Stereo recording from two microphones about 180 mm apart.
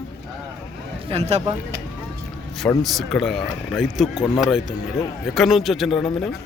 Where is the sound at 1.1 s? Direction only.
35° right (ahead or behind).